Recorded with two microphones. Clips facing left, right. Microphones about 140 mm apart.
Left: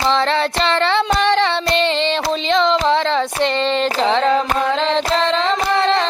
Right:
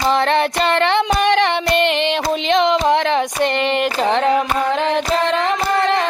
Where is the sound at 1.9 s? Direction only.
15° right (ahead or behind).